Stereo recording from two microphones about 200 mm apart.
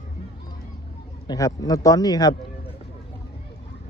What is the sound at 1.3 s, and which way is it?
Speech, 15° left (ahead or behind).